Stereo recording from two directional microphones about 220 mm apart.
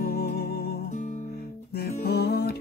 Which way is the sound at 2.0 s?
45° left (ahead or behind).